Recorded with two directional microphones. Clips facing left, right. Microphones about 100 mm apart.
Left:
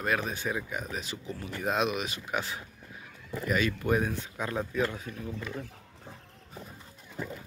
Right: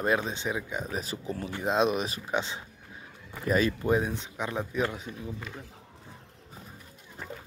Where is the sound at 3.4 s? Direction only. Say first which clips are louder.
Right 3 dB; 30° right (ahead or behind).